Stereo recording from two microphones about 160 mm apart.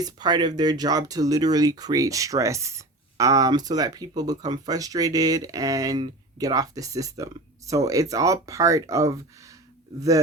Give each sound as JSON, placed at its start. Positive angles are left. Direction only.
{"t": 0.0, "sound": "speech", "side_deg": -25}